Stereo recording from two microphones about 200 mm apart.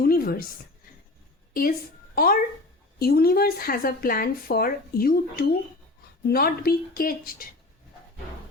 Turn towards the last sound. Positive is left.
turn(degrees=45)  # may be behind; listen again after turning